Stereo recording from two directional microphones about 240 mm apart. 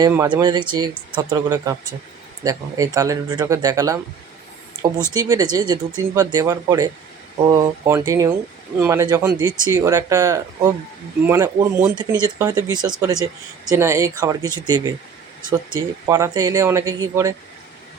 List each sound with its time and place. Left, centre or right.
0.0 s speech: centre
5.1 s speech: centre